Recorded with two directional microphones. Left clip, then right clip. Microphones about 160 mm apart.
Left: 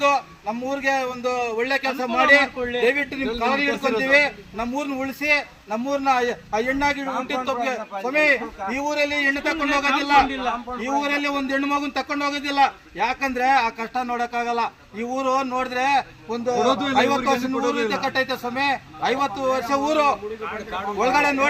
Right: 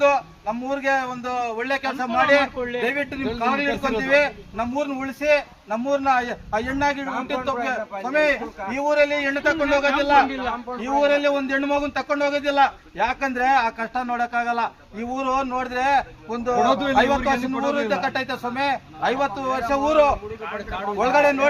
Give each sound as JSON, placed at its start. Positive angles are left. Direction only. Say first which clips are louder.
{"t": 0.0, "sound": "a man's voice", "louder": "right 1 dB", "side_deg": 0}
{"t": 10.3, "sound": "a man's voice", "louder": "left 1 dB", "side_deg": 30}
{"t": 11.0, "sound": "a man's voice", "louder": "right 4 dB", "side_deg": 0}